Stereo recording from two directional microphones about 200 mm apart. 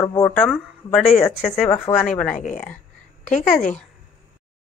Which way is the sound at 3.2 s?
40° left (ahead or behind).